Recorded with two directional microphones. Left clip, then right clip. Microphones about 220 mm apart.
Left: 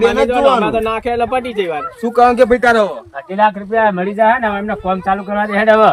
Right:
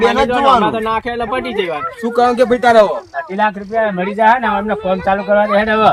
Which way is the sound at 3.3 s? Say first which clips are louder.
Left 3 dB; 20° left (ahead or behind).